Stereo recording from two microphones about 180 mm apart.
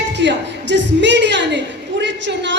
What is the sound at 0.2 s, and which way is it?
A woman's voice, 80° right.